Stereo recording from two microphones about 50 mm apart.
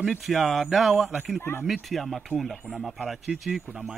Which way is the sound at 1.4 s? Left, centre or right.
Left.